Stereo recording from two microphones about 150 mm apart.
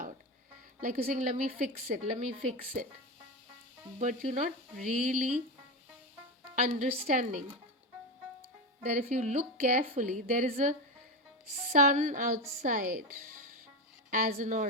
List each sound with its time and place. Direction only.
0.8 s a woman's voice: 60° right (ahead or behind)
4.0 s a woman's voice: 55° right (ahead or behind)
6.6 s a woman's voice: 60° right (ahead or behind)
8.8 s a woman's voice: 50° right (ahead or behind)
14.1 s a woman's voice: 65° right (ahead or behind)